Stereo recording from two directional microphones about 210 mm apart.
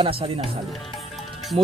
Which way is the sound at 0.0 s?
25° right (ahead or behind).